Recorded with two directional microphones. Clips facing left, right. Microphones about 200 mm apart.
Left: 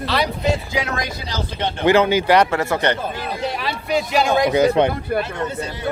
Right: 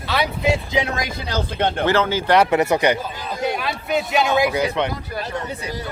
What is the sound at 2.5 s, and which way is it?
Speech, 20° right (ahead or behind).